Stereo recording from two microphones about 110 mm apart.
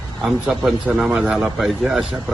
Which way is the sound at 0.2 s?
5° right (ahead or behind).